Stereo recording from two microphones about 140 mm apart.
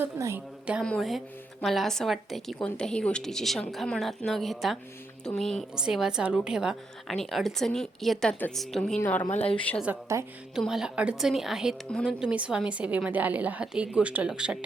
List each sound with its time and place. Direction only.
0.0 s a woman's voice: 15° right (ahead or behind)
0.9 s a woman's voice: centre (ahead or behind)
9.3 s a woman's voice: 45° left (ahead or behind)
9.8 s a woman's voice: 15° right (ahead or behind)
10.5 s a woman's voice: 5° right (ahead or behind)